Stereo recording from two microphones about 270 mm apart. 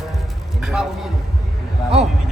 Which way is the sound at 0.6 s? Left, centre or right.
Centre.